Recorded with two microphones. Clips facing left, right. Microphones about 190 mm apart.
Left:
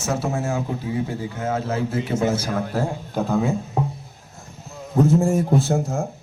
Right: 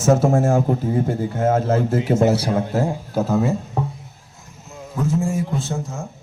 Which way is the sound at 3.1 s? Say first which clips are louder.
Right 1 dB; 5° right (ahead or behind).